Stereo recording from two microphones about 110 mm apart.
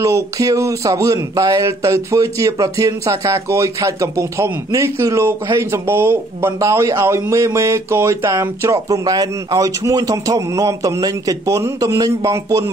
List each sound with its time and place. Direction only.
0.0 s speech: 30° right (ahead or behind)